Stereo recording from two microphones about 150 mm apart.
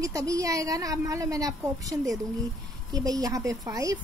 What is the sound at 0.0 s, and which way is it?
Speech, 20° right (ahead or behind).